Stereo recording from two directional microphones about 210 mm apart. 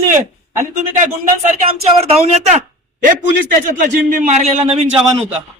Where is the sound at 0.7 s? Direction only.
35° right (ahead or behind).